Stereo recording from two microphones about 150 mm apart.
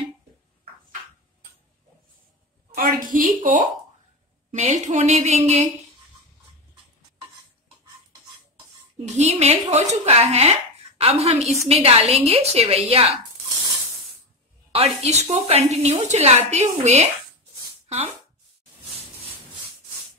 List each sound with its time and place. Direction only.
2.7 s a woman's voice: 70° right (ahead or behind)
4.5 s speech: 50° right (ahead or behind)
8.9 s speech: 50° right (ahead or behind)
14.7 s a woman's voice: 45° right (ahead or behind)